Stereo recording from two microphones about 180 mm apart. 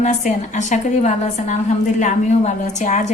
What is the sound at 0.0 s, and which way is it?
A woman's voice, 45° left (ahead or behind).